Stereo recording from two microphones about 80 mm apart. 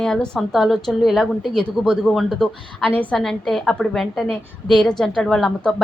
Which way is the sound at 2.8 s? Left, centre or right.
Centre.